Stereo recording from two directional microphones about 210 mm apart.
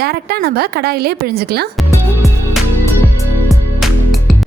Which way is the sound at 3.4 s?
Centre (ahead or behind).